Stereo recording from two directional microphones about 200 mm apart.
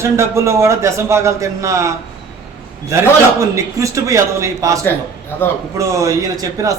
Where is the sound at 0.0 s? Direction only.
15° right (ahead or behind).